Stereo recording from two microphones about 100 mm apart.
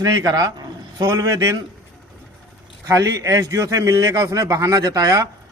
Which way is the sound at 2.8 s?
35° right (ahead or behind).